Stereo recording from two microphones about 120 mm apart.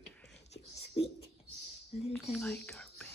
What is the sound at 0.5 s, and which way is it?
Whispering, 55° left (ahead or behind).